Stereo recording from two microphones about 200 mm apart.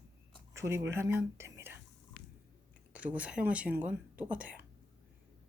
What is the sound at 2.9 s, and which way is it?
Speech, 5° right (ahead or behind).